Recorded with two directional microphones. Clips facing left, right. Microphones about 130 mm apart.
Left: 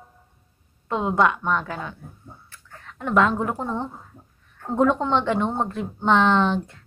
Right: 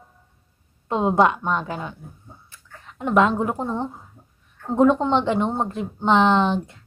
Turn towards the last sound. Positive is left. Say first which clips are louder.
# right 1 dB
turn(degrees=-20)  # may be behind; listen again after turning